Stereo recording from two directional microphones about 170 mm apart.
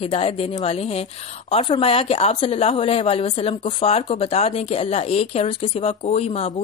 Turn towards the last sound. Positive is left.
turn(degrees=35)  # may be behind; listen again after turning